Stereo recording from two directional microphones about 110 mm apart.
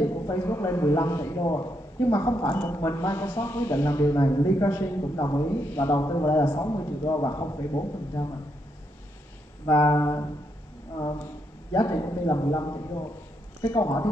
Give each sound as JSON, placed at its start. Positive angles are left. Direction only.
{"t": 0.0, "sound": "a man's voice", "side_deg": 35}
{"t": 3.2, "sound": "a woman's voice", "side_deg": 20}
{"t": 4.6, "sound": "a woman's voice", "side_deg": 20}
{"t": 5.0, "sound": "a man's voice", "side_deg": 35}
{"t": 9.7, "sound": "a man's voice", "side_deg": 30}
{"t": 11.7, "sound": "a man's voice", "side_deg": 35}